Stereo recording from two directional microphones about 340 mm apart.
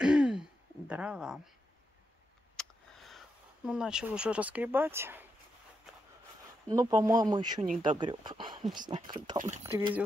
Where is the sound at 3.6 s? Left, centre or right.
Centre.